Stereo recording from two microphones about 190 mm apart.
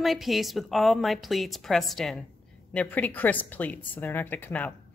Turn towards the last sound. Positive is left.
turn(degrees=10)  # may be behind; listen again after turning